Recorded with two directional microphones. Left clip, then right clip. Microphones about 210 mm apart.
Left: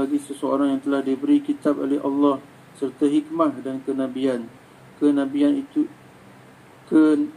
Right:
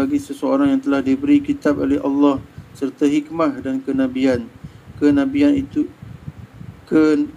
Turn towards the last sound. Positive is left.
turn(degrees=-40)  # may be behind; listen again after turning